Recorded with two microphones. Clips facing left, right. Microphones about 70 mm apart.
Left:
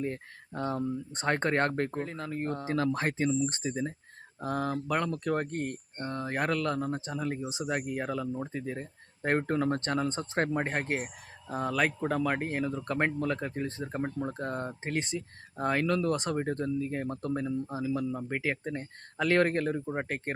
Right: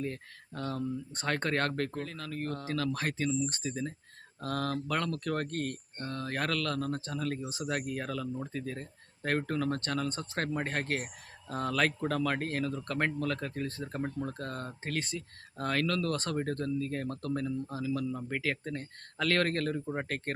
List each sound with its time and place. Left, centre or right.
0.0 s speech: left